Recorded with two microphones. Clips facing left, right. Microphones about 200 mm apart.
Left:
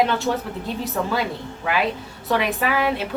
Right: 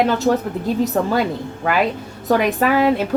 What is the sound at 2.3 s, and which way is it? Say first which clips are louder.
Speech: right 6 dB; 45° right (ahead or behind).